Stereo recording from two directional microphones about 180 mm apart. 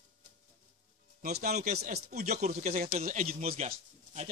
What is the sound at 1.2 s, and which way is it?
A man's voice, 60° right (ahead or behind).